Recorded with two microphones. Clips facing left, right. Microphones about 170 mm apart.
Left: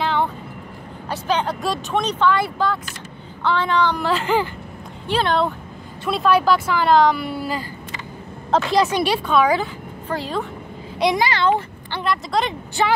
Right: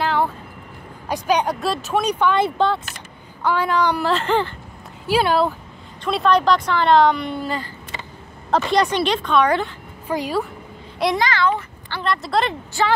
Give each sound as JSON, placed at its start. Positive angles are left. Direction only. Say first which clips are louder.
{"t": 0.0, "sound": "vehicle", "louder": "right 1 dB", "side_deg": -5}
{"t": 1.0, "sound": "speech", "louder": "right 2 dB", "side_deg": -15}
{"t": 3.4, "sound": "speech", "louder": "even", "side_deg": -10}
{"t": 4.1, "sound": "speech", "louder": "even", "side_deg": 0}
{"t": 6.0, "sound": "speech", "louder": "even", "side_deg": 5}
{"t": 10.0, "sound": "speech", "louder": "right 3 dB", "side_deg": -10}
{"t": 11.0, "sound": "speech", "louder": "left 1 dB", "side_deg": 0}
{"t": 11.3, "sound": "speech", "louder": "left 2 dB", "side_deg": 20}
{"t": 12.0, "sound": "speech", "louder": "right 1 dB", "side_deg": 0}
{"t": 12.8, "sound": "speech", "louder": "even", "side_deg": 20}